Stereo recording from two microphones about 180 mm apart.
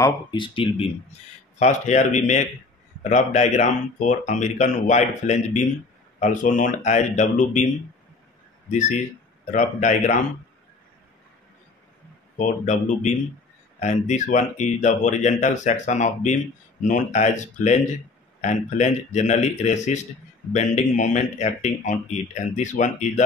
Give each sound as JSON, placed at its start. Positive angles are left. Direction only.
{"t": 0.0, "sound": "speech", "side_deg": 25}
{"t": 8.6, "sound": "speech", "side_deg": 40}
{"t": 12.4, "sound": "speech", "side_deg": 45}